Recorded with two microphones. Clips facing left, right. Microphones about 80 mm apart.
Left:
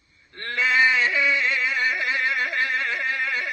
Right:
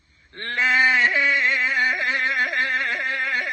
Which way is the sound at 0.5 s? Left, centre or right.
Right.